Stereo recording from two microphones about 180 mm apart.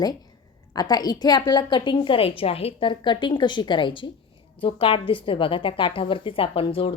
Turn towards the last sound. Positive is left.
turn(degrees=30)  # may be behind; listen again after turning